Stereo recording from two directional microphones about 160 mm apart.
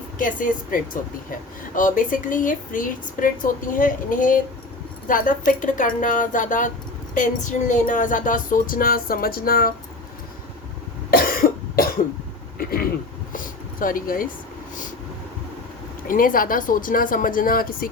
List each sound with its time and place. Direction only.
0.2 s speech: 55° left (ahead or behind)
11.1 s cough: 70° left (ahead or behind)
12.5 s a sound: 70° left (ahead or behind)
13.3 s speech: 60° left (ahead or behind)
16.0 s speech: 60° left (ahead or behind)